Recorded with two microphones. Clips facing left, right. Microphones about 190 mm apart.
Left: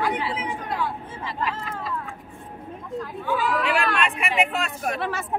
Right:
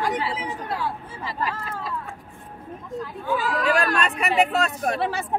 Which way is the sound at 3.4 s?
40° right (ahead or behind).